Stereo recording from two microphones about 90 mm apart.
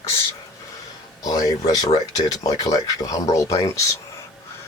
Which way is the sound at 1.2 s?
40° left (ahead or behind).